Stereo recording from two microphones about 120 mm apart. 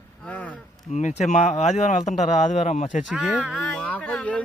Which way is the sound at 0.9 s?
80° left.